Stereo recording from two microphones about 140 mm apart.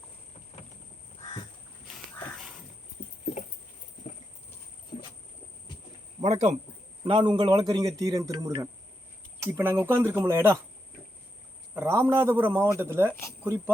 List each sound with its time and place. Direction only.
6.2 s speech: 55° right (ahead or behind)
7.0 s a man's voice: 35° right (ahead or behind); by 10.6 s 20° right (ahead or behind)
11.7 s a man's voice: 15° right (ahead or behind)